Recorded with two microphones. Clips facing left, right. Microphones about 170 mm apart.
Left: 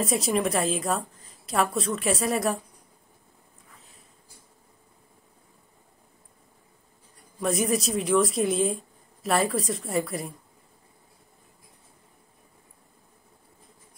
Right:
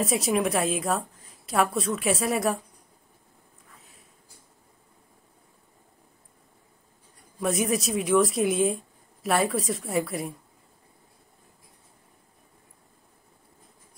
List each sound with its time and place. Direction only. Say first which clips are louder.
0.0 s a woman's voice: even; centre (ahead or behind)
7.3 s a woman's voice: even; centre (ahead or behind)